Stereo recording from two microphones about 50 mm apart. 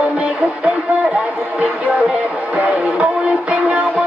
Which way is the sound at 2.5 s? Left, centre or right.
Right.